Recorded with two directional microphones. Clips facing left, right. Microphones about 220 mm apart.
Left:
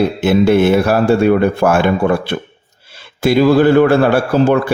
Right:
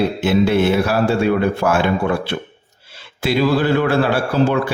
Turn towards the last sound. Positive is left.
turn(degrees=45)  # may be behind; listen again after turning